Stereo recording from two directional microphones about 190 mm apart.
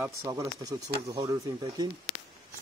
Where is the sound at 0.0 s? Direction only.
15° right (ahead or behind).